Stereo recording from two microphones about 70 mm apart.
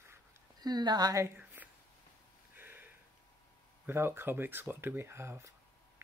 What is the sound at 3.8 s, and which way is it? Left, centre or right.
Speech, right.